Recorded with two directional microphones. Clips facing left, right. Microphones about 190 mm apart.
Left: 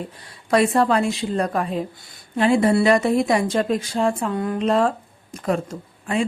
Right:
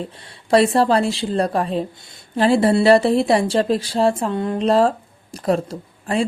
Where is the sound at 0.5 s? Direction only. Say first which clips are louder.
Right 3 dB; 30° right (ahead or behind).